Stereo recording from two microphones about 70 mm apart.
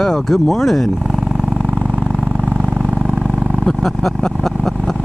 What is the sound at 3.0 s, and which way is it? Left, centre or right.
Roaring cats, centre.